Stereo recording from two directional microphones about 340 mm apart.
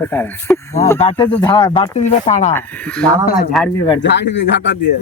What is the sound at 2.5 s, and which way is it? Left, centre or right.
Speech, centre.